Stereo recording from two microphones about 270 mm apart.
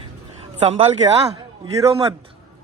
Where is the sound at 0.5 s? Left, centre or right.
Right.